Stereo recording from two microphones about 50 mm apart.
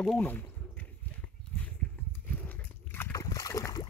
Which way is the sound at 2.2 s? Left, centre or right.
Left.